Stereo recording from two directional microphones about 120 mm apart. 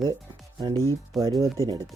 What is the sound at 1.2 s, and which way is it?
Speech, 30° right (ahead or behind).